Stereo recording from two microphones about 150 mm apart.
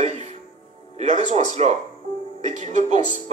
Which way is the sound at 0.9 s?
45° right (ahead or behind).